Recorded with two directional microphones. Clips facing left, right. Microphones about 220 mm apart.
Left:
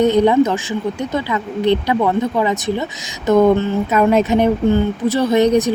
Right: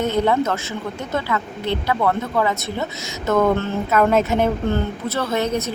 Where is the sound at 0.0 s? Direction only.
15° left (ahead or behind).